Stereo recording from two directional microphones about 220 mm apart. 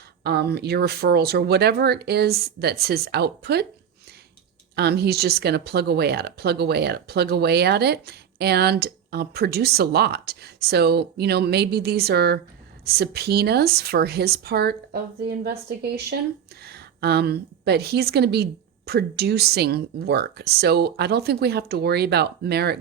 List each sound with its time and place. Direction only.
0.2 s speech: 45° right (ahead or behind)
4.7 s a woman's voice: 45° right (ahead or behind)